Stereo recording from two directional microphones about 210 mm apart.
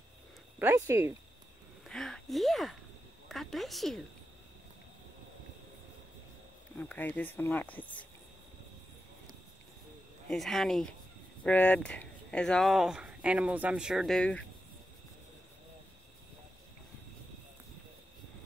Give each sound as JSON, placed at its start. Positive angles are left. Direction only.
{"t": 0.6, "sound": "speech", "side_deg": -15}
{"t": 1.9, "sound": "a sound", "side_deg": 0}
{"t": 3.3, "sound": "speech", "side_deg": 0}
{"t": 6.8, "sound": "speech", "side_deg": 10}
{"t": 10.2, "sound": "speech", "side_deg": 0}